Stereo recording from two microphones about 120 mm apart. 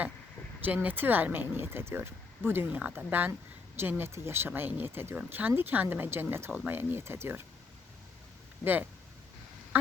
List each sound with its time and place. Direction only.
0.6 s speech: 15° right (ahead or behind)